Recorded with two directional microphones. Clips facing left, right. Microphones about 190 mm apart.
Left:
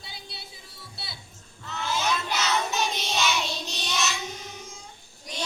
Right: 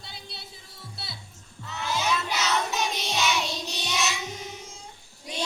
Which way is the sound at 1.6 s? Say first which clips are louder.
Even; 5° right (ahead or behind).